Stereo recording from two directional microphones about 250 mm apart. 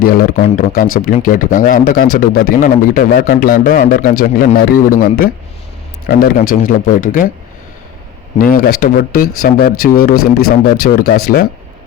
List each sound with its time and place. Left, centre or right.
0.0 s speech: left
8.4 s speech: left